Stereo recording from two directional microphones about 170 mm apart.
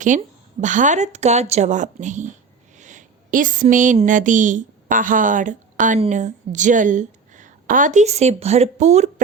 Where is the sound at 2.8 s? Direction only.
45° right (ahead or behind).